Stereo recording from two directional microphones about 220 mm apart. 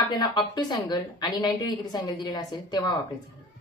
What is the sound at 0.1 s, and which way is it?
A woman's voice, 20° left (ahead or behind).